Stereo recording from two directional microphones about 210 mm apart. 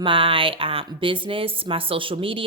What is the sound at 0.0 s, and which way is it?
A woman's voice, 25° right (ahead or behind).